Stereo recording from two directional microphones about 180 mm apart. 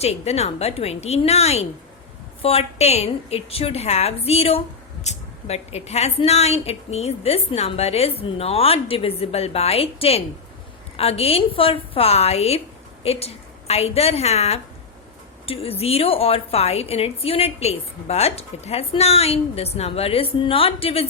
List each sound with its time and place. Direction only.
0.0 s a woman's voice: 35° left (ahead or behind)